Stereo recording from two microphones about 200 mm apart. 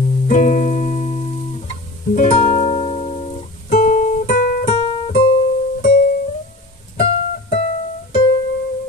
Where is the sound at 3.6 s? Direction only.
35° left (ahead or behind).